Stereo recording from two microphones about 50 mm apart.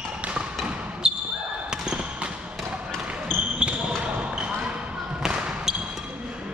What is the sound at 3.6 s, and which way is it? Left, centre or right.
Basketball bounce, centre.